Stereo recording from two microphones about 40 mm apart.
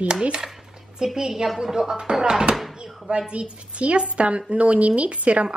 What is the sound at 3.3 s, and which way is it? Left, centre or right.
A woman's voice, right.